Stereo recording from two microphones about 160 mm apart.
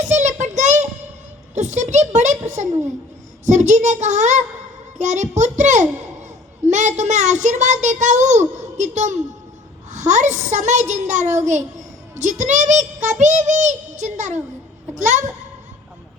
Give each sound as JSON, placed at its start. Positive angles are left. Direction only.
{"t": 0.0, "sound": "child singing", "side_deg": -50}
{"t": 1.5, "sound": "a child's voice", "side_deg": -50}
{"t": 3.4, "sound": "a child's voice", "side_deg": -50}